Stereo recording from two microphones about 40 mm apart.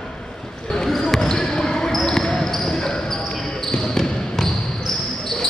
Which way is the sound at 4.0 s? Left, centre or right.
Centre.